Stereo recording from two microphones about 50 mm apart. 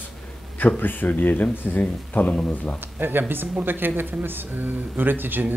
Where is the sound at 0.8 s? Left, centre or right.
Left.